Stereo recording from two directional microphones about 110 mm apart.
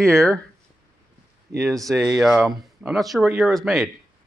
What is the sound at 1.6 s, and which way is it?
Speech, centre (ahead or behind).